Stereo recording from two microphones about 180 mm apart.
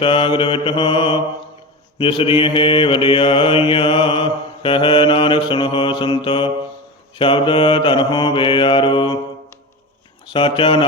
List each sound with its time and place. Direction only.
0.0 s mantra: 30° left (ahead or behind)
10.2 s mantra: 25° left (ahead or behind)